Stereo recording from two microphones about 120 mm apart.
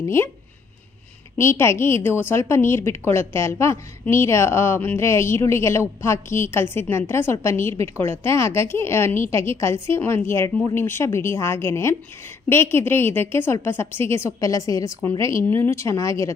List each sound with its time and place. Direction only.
0.0 s speech: 20° left (ahead or behind)
1.4 s speech: 20° left (ahead or behind)